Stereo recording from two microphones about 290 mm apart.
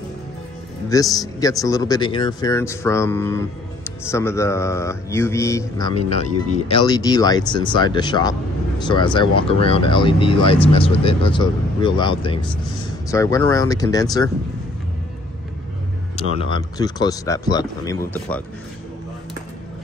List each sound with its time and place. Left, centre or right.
1.1 s speech: centre
16.2 s speech: centre